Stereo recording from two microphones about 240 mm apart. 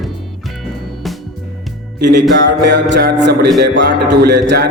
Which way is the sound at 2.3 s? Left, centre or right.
Right.